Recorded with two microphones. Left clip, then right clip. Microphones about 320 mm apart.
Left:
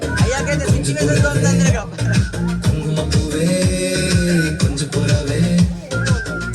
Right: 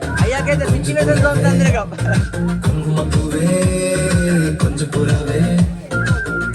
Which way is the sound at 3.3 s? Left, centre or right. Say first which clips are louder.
Right 2 dB; centre.